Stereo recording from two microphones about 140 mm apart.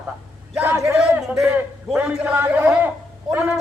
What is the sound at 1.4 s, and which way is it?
A man's voice, 5° right (ahead or behind).